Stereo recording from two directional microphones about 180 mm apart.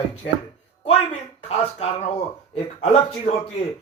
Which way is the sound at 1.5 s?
35° left (ahead or behind).